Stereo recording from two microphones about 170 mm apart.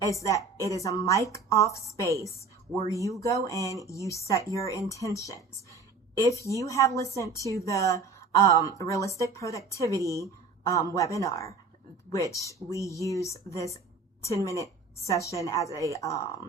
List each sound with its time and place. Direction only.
0.0 s a woman's voice: 20° left (ahead or behind)
6.6 s a woman's voice: 20° left (ahead or behind)